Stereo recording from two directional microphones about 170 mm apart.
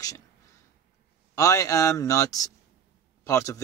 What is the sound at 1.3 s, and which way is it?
Speech, 20° left (ahead or behind).